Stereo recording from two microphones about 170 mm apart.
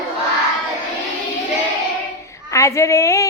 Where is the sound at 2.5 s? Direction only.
15° left (ahead or behind).